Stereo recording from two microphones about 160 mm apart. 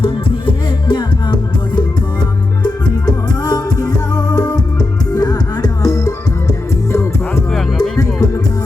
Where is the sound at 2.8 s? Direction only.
25° left (ahead or behind).